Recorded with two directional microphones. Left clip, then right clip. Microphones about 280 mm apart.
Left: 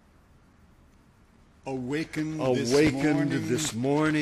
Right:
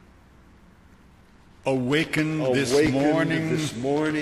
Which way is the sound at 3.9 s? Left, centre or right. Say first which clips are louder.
Right 1 dB; centre.